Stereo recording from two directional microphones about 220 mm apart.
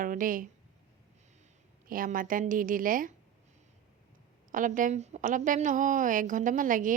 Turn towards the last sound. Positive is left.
turn(degrees=-35)  # may be behind; listen again after turning